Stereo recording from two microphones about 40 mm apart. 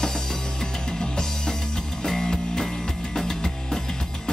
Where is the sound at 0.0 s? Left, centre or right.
Centre.